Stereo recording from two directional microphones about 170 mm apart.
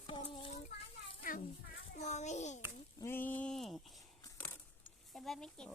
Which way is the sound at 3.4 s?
5° left (ahead or behind).